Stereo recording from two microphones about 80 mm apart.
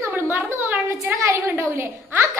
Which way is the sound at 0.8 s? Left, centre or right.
Right.